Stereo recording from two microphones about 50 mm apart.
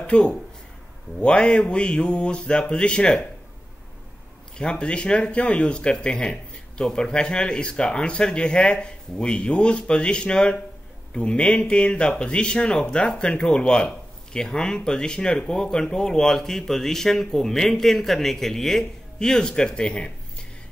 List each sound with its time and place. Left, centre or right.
0.0 s speech: centre
4.6 s speech: centre